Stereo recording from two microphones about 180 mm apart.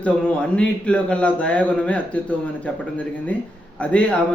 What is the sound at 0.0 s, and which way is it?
Speech, 5° left (ahead or behind).